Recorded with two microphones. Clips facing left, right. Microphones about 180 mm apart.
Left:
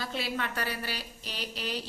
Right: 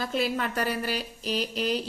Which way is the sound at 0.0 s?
45° right (ahead or behind).